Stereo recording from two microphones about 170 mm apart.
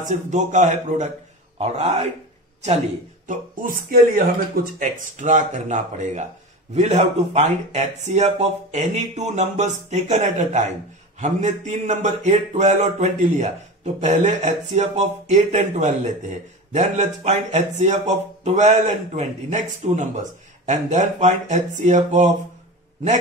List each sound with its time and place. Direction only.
0.1 s speech: 45° right (ahead or behind)
3.3 s speech: 55° right (ahead or behind)